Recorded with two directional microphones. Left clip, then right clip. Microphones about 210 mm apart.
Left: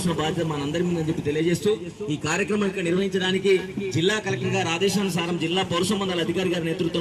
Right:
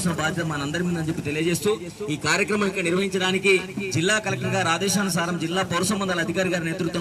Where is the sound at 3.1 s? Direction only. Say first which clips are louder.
Right 1 dB; 20° left (ahead or behind).